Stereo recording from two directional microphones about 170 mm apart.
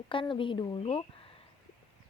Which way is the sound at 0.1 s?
30° left (ahead or behind).